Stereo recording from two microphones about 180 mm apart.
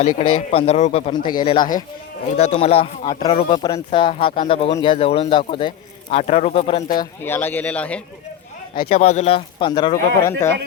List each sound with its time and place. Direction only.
0.0 s speech: 40° left (ahead or behind)
1.1 s speech: 25° left (ahead or behind)
2.4 s speech: 35° left (ahead or behind)
6.9 s speech: 20° left (ahead or behind)
7.3 s speech: 10° left (ahead or behind)
8.9 s speech: 35° left (ahead or behind); by 10.5 s 20° left (ahead or behind)